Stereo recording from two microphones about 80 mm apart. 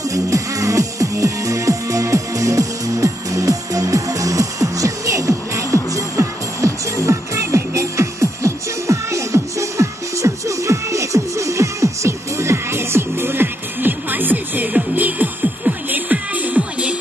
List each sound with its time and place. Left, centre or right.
0.1 s music: right; by 16.9 s centre